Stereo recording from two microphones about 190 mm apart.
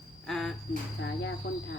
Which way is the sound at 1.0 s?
70° left (ahead or behind).